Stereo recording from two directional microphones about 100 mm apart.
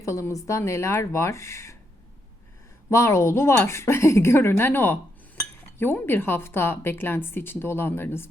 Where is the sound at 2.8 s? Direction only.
30° left (ahead or behind).